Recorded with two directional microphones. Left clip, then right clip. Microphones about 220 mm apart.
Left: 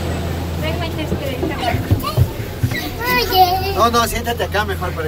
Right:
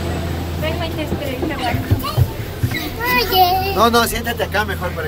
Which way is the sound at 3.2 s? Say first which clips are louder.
Left 1 dB; 10° left (ahead or behind).